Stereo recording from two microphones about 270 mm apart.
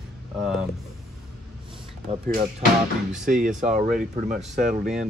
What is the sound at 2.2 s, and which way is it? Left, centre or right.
Speech, right.